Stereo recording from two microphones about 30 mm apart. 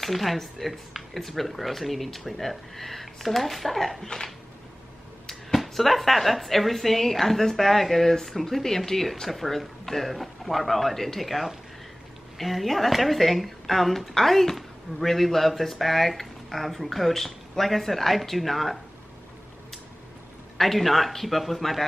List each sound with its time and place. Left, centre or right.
0.0 s a woman's voice: centre
5.5 s a woman's voice: centre
9.0 s a woman's voice: centre
20.5 s a woman's voice: centre